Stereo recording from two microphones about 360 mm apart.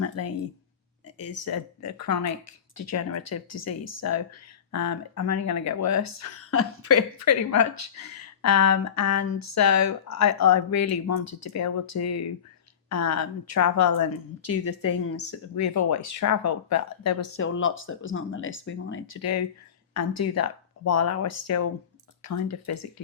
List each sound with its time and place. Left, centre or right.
0.0 s a woman's voice: left